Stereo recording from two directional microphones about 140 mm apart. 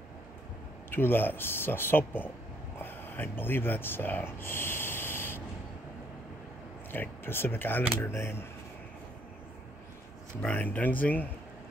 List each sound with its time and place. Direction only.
0.8 s speech: 15° left (ahead or behind)
6.9 s speech: 15° left (ahead or behind)
10.4 s speech: 10° left (ahead or behind)